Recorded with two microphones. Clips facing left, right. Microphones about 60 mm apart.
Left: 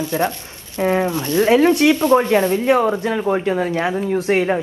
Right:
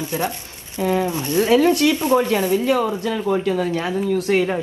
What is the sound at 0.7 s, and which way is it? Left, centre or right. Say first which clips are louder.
Speech: left 2 dB; left.